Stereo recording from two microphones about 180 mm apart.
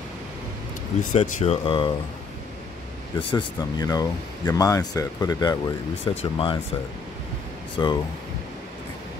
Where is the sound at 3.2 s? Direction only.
25° left (ahead or behind).